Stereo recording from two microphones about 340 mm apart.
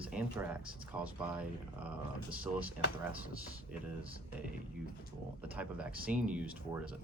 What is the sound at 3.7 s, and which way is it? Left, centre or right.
Speech, centre.